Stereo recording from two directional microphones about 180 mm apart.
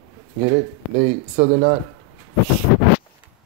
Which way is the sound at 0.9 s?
40° right (ahead or behind).